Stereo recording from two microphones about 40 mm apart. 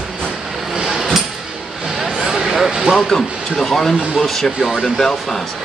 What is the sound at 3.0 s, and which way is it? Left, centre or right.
Speech, centre.